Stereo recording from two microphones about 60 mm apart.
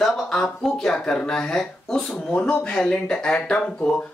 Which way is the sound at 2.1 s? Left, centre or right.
Centre.